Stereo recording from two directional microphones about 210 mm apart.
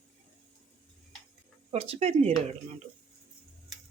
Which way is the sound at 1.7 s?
30° right (ahead or behind).